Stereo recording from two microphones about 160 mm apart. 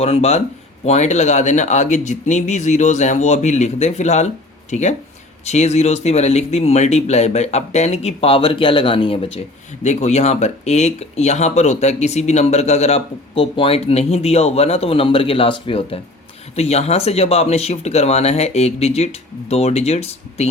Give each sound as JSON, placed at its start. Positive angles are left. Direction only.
{"t": 0.0, "sound": "speech", "side_deg": 40}
{"t": 9.8, "sound": "speech", "side_deg": 45}